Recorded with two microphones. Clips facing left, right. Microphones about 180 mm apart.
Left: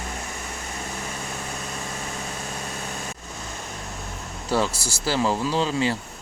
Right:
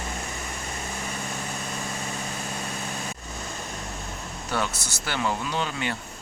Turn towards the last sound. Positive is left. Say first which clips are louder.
# left 6 dB
turn(degrees=30)  # may be behind; listen again after turning